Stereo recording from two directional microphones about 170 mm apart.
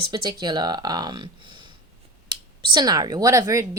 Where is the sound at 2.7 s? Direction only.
25° right (ahead or behind).